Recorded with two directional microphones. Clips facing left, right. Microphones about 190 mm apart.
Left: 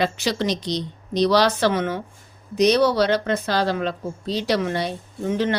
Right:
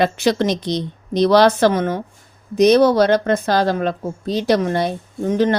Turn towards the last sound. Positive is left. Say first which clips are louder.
# right 5 dB
turn(degrees=-45)  # may be behind; listen again after turning